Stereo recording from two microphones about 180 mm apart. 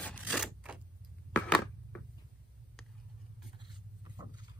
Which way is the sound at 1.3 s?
5° left (ahead or behind).